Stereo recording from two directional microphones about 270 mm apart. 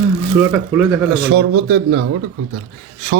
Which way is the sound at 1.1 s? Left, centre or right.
Right.